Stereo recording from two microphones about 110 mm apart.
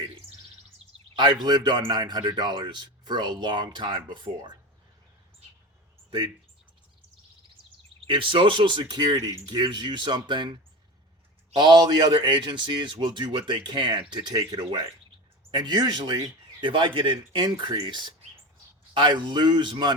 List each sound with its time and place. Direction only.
1.5 s speech: 40° right (ahead or behind)
6.1 s speech: 50° right (ahead or behind)
8.0 s speech: 50° right (ahead or behind)
9.1 s speech: 30° right (ahead or behind)
9.5 s speech: 40° right (ahead or behind)
11.5 s speech: 40° right (ahead or behind)